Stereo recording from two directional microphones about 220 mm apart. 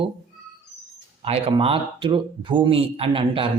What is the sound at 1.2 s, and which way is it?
Speech, 25° right (ahead or behind).